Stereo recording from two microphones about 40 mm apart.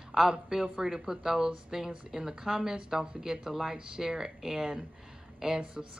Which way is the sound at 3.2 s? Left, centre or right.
Centre.